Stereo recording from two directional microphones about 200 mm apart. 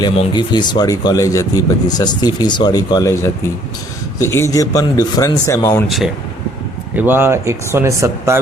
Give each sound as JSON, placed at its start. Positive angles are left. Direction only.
{"t": 0.0, "sound": "speech", "side_deg": 20}
{"t": 6.9, "sound": "speech", "side_deg": -10}